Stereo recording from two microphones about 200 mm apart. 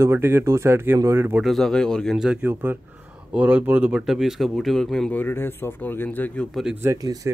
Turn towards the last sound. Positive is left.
turn(degrees=-20)  # may be behind; listen again after turning